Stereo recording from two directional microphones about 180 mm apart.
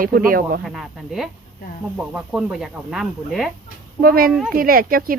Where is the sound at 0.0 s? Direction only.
50° right (ahead or behind).